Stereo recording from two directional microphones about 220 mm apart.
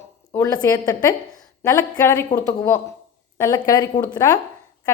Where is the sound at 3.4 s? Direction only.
10° left (ahead or behind).